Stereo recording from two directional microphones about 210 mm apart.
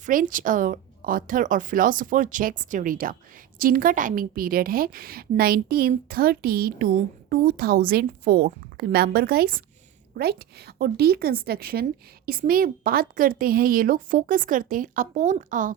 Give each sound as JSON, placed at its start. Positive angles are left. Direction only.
{"t": 0.0, "sound": "a woman's voice", "side_deg": -40}